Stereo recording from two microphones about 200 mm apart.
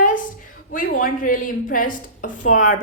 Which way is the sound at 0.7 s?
40° left (ahead or behind).